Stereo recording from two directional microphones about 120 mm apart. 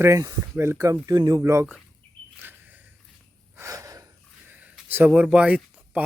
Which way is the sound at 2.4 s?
15° right (ahead or behind).